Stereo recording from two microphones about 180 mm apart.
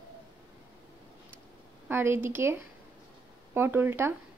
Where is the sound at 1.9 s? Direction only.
10° right (ahead or behind).